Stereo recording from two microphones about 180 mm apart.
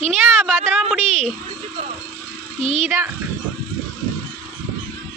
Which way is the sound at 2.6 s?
40° right (ahead or behind).